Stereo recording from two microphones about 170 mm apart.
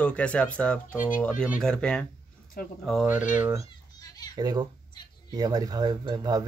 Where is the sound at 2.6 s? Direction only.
60° left (ahead or behind).